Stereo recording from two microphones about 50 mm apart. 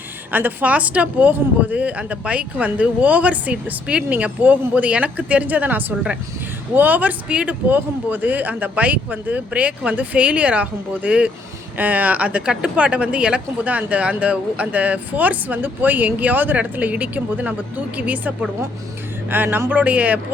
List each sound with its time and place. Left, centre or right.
0.3 s speech: right
19.3 s a sound: right
19.8 s speech: right